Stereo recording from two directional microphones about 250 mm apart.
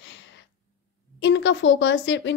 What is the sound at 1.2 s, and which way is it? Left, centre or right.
A woman's voice, left.